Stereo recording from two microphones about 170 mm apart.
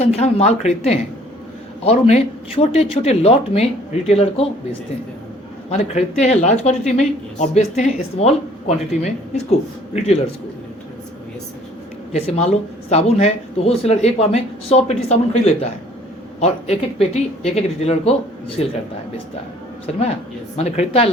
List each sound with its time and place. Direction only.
0.0 s speech: 40° left (ahead or behind)
5.7 s speech: 40° left (ahead or behind)
12.1 s speech: 40° left (ahead or behind)
20.6 s speech: 35° left (ahead or behind)